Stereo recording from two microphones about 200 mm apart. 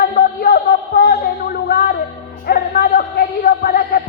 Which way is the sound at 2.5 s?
50° left (ahead or behind).